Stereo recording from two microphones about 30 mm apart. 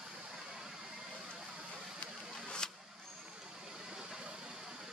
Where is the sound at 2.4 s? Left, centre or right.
Left.